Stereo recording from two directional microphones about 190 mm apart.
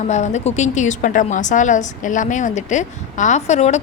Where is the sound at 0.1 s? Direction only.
35° left (ahead or behind).